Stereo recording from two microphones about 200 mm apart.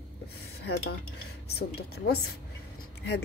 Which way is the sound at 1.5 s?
50° left (ahead or behind).